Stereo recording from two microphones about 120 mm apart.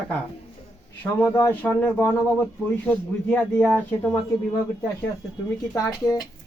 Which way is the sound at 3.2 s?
5° left (ahead or behind).